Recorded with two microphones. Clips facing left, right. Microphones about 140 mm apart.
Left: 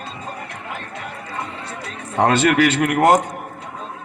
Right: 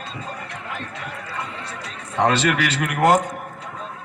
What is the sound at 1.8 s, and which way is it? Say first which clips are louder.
A man's voice: left 2 dB; 45° left (ahead or behind).